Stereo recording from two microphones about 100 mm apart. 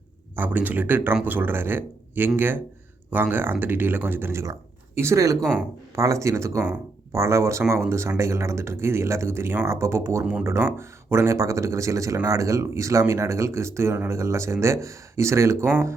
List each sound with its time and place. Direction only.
0.3 s speech: 20° right (ahead or behind)